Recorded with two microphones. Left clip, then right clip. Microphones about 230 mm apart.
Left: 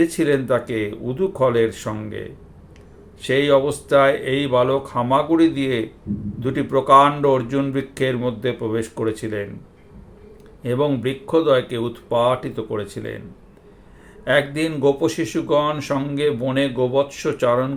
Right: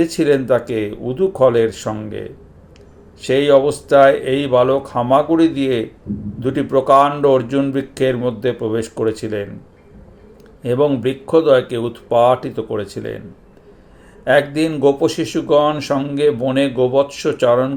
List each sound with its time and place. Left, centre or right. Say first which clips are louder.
0.0 s speech: right 3 dB; centre
10.6 s speech: right 5 dB; centre
14.3 s speech: right 4 dB; centre